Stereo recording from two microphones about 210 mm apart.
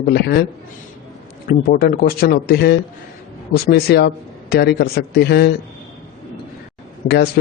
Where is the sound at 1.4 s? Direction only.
45° left (ahead or behind).